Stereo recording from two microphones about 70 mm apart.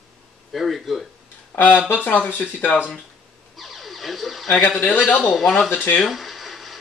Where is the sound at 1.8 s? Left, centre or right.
Left.